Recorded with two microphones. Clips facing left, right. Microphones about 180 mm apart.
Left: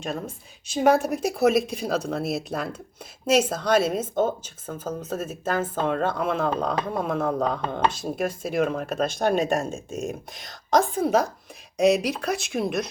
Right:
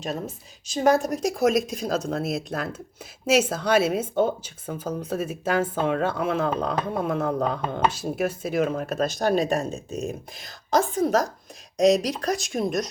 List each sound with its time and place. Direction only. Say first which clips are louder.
0.7 s speech: left 1 dB; centre (ahead or behind)